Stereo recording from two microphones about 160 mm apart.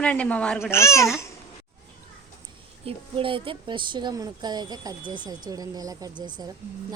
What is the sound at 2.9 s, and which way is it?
Speech, 35° right (ahead or behind).